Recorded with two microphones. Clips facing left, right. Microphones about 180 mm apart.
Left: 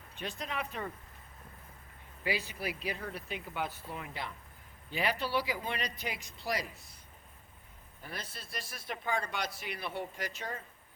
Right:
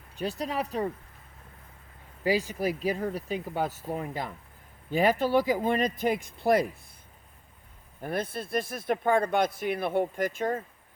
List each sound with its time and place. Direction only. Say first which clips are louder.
0.2 s speech: right 8 dB; 40° right (ahead or behind)
2.2 s speech: right 9 dB; 45° right (ahead or behind)
8.0 s speech: right 14 dB; 55° right (ahead or behind)